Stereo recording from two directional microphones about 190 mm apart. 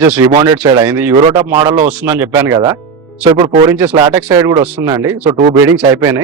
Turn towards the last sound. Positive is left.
turn(degrees=-10)  # may be behind; listen again after turning